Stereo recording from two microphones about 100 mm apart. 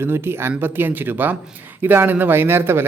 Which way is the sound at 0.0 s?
25° right (ahead or behind).